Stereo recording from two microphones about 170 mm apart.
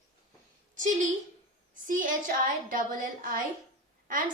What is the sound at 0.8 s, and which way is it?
A woman's voice, 45° right (ahead or behind).